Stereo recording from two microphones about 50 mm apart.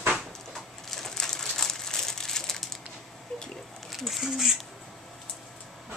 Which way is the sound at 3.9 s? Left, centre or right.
Centre.